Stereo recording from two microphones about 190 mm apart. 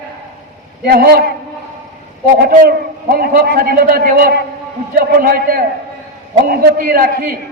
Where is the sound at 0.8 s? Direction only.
55° right (ahead or behind).